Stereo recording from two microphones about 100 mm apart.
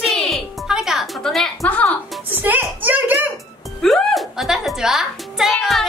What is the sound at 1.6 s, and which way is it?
Music, 15° left (ahead or behind).